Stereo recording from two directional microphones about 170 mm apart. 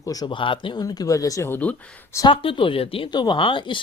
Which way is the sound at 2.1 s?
30° left (ahead or behind).